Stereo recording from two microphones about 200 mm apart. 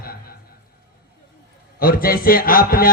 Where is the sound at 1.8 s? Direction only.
45° left (ahead or behind).